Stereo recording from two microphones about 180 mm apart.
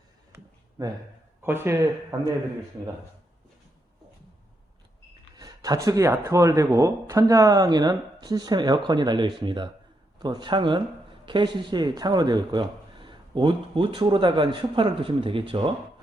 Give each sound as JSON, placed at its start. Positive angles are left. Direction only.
{"t": 0.8, "sound": "speech", "side_deg": -20}
{"t": 5.4, "sound": "speech", "side_deg": -20}